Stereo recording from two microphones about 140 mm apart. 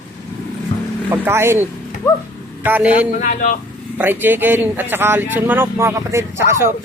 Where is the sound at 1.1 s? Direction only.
15° right (ahead or behind).